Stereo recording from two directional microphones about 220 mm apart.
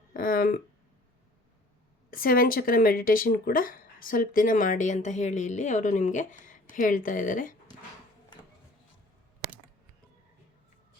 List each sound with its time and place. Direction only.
0.1 s speech: 40° left (ahead or behind)
2.0 s speech: 40° left (ahead or behind)